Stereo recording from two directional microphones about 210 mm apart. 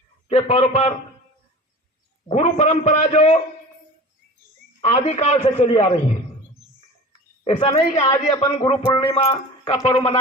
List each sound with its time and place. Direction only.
0.3 s a woman's voice: 30° left (ahead or behind)
2.2 s a woman's voice: 35° left (ahead or behind)
4.8 s a woman's voice: 30° left (ahead or behind)
7.4 s a woman's voice: 30° left (ahead or behind)